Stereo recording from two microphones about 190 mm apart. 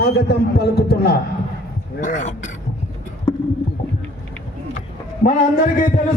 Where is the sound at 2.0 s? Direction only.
40° left (ahead or behind).